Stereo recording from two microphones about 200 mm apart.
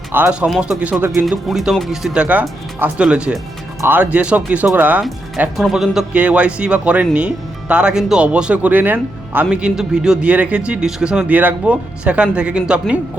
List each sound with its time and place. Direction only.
0.1 s speech: 5° right (ahead or behind)